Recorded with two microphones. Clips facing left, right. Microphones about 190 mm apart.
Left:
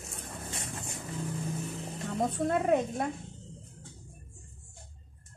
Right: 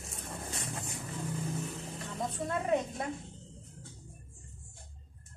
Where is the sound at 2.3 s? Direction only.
55° left (ahead or behind).